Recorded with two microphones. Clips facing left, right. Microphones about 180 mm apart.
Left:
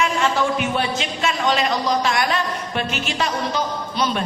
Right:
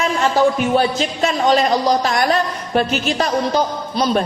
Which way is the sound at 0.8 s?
40° right (ahead or behind).